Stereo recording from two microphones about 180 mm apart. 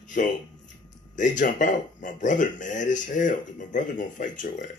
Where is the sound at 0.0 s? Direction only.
45° left (ahead or behind).